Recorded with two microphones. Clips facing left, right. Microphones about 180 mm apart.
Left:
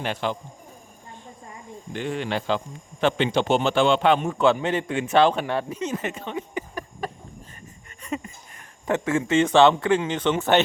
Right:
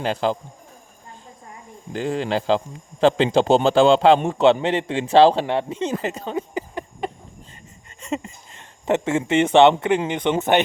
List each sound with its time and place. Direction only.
0.0 s speech: 35° right (ahead or behind)
1.9 s speech: 35° right (ahead or behind)
8.0 s speech: 25° right (ahead or behind)